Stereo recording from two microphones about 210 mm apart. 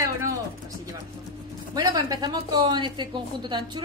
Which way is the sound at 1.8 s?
20° right (ahead or behind).